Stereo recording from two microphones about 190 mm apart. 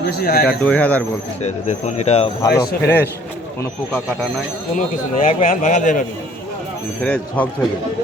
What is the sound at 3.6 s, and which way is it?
Speech, 5° left (ahead or behind).